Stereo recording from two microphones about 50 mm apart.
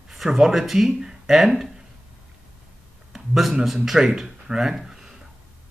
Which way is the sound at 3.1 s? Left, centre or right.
Centre.